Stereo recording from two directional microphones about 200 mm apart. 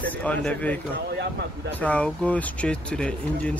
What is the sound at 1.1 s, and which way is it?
Speech, 55° right (ahead or behind).